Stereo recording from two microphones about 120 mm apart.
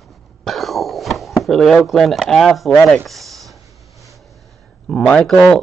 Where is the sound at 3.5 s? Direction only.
25° right (ahead or behind).